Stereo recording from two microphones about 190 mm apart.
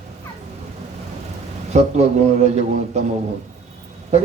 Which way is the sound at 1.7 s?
35° right (ahead or behind).